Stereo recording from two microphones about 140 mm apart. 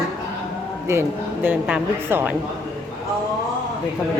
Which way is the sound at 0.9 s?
20° right (ahead or behind).